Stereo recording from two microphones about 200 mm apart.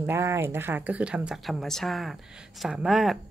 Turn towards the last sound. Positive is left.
turn(degrees=0)  # may be behind; listen again after turning